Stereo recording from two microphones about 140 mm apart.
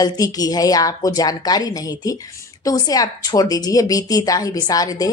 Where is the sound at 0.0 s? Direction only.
25° left (ahead or behind).